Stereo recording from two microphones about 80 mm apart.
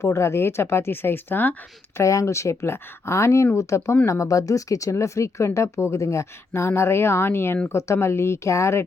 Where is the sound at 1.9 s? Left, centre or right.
Left.